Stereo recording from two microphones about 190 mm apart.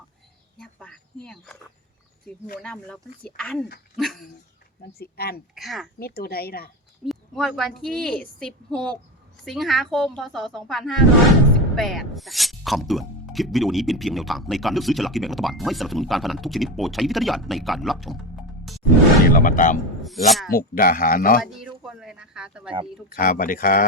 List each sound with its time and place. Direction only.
0.6 s a sound: 5° left (ahead or behind)
2.6 s speech: 5° left (ahead or behind)
3.9 s dog: centre (ahead or behind)
4.8 s speech: 55° left (ahead or behind)
5.5 s speech: centre (ahead or behind)
6.0 s speech: 55° left (ahead or behind)
7.0 s speech: centre (ahead or behind)
19.2 s speech: 50° left (ahead or behind)
20.0 s a sound: centre (ahead or behind)
20.5 s speech: 50° left (ahead or behind)
21.4 s a sound: centre (ahead or behind)
23.0 s speech: 50° left (ahead or behind)